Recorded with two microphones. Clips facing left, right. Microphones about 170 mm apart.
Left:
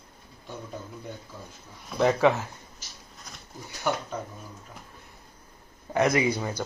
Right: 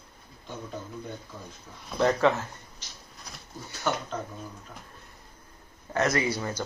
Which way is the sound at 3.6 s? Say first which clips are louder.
Left 1 dB; 10° left (ahead or behind).